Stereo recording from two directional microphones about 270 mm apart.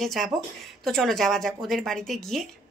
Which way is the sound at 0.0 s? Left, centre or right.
Centre.